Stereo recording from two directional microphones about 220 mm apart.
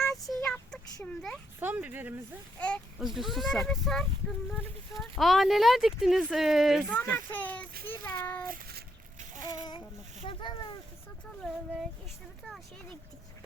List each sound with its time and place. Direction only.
0.3 s a sound: centre (ahead or behind)
1.5 s speech: 10° right (ahead or behind)
2.6 s speech: 5° left (ahead or behind)
7.3 s child singing: 10° left (ahead or behind)
8.4 s a sound: 40° right (ahead or behind)
9.4 s child singing: 15° left (ahead or behind)
10.2 s speech: 20° left (ahead or behind)
11.4 s speech: centre (ahead or behind)